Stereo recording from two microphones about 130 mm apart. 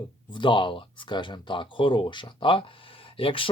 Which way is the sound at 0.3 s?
35° left (ahead or behind).